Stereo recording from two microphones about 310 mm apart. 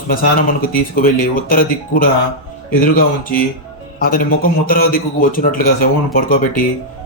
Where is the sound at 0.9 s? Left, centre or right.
Left.